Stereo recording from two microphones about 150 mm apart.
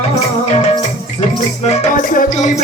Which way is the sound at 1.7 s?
50° left (ahead or behind).